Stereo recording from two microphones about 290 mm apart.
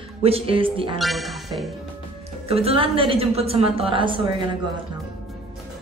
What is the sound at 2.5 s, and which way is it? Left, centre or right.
A woman's voice, right.